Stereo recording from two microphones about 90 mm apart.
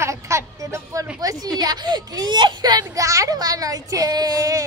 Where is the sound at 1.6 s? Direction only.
50° right (ahead or behind).